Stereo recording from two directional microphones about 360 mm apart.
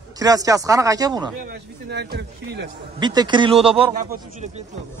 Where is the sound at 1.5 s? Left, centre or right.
Right.